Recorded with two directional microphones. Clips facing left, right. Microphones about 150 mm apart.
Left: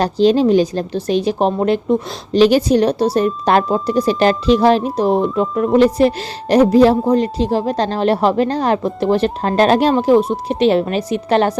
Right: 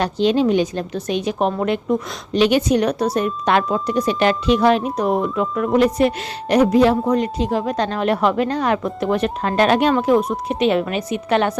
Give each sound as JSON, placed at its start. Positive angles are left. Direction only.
{"t": 0.0, "sound": "a woman's voice", "side_deg": 35}